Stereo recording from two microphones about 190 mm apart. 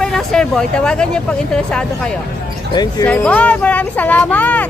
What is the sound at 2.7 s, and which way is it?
Speech, 20° left (ahead or behind).